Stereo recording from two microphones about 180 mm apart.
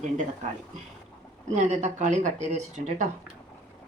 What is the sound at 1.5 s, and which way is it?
Speech, 40° right (ahead or behind).